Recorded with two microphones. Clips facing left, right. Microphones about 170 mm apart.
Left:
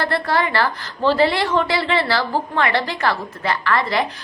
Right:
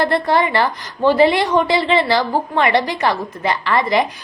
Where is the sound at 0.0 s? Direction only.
20° right (ahead or behind).